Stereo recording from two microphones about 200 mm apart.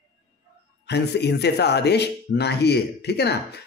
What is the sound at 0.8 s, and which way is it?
A man's voice, 55° left (ahead or behind).